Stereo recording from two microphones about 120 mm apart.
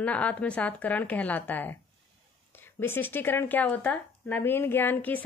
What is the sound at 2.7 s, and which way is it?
Speech, 20° left (ahead or behind).